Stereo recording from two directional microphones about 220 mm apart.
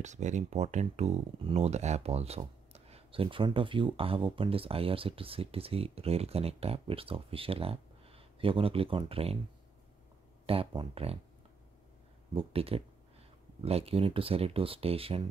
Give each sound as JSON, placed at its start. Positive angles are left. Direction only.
{"t": 0.0, "sound": "speech", "side_deg": -35}
{"t": 10.4, "sound": "speech", "side_deg": -25}
{"t": 12.4, "sound": "speech", "side_deg": -25}